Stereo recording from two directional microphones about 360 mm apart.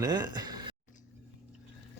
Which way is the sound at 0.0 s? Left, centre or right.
Centre.